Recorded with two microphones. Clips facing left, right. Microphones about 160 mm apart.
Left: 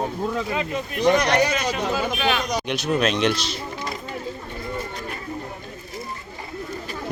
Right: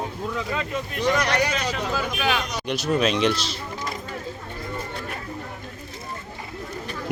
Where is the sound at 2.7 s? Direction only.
Centre (ahead or behind).